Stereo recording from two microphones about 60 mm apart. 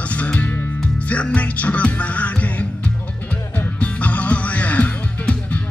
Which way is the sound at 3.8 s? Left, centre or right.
Left.